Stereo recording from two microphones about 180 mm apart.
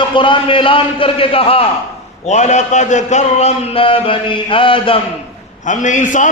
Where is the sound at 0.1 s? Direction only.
25° left (ahead or behind).